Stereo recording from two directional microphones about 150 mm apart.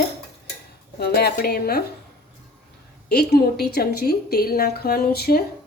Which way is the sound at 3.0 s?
90° left.